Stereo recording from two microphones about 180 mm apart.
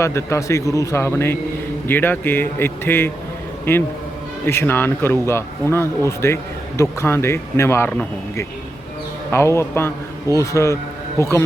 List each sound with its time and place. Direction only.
0.0 s a man's voice: 15° left (ahead or behind)
4.4 s a man's voice: 10° left (ahead or behind)